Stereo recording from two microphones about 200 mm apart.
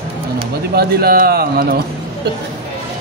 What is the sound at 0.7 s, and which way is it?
Speech, 50° right (ahead or behind).